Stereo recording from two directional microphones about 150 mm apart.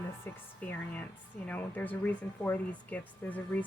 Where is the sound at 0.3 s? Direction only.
15° left (ahead or behind).